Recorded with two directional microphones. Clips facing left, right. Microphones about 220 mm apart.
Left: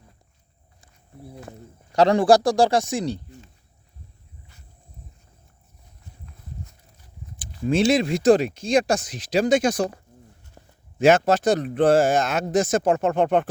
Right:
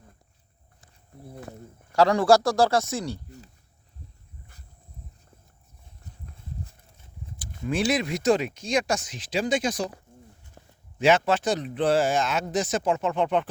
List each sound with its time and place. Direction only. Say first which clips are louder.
1.9 s speech: left 3 dB; 20° left (ahead or behind)
7.7 s speech: left 6 dB; 25° left (ahead or behind); by 9.6 s 45° left (ahead or behind)
9.6 s speech: left 6 dB; 65° left (ahead or behind)
11.0 s speech: left 4 dB; 45° left (ahead or behind)